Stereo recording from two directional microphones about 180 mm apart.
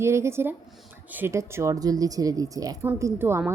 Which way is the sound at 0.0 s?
15° right (ahead or behind).